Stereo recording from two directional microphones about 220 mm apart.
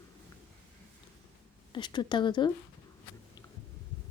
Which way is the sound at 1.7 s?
20° left (ahead or behind).